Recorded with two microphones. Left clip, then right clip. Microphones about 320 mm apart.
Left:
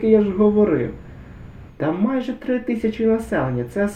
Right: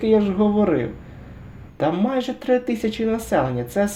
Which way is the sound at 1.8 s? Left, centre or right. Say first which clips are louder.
Right 1 dB; centre.